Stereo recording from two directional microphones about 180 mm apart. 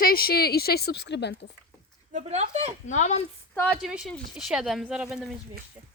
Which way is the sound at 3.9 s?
5° right (ahead or behind).